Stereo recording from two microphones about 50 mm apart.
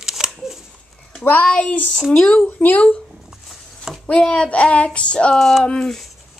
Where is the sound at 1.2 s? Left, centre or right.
Left.